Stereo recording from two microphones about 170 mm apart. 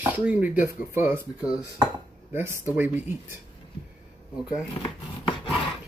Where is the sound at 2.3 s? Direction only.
10° right (ahead or behind).